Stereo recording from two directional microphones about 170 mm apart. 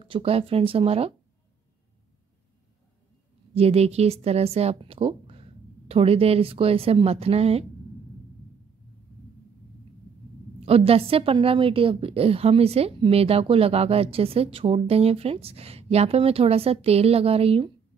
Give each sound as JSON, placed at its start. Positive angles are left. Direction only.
{"t": 0.0, "sound": "a woman's voice", "side_deg": -35}
{"t": 3.5, "sound": "a woman's voice", "side_deg": -35}
{"t": 10.6, "sound": "a woman's voice", "side_deg": -35}